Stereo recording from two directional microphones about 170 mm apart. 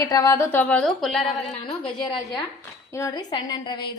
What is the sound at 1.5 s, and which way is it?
Speech, 35° left (ahead or behind).